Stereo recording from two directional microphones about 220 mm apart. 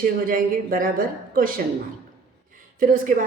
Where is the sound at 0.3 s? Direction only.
40° right (ahead or behind).